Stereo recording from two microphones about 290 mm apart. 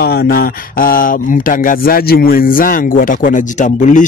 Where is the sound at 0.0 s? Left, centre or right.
Left.